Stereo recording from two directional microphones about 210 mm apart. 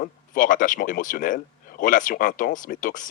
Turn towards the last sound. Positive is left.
turn(degrees=40)  # may be behind; listen again after turning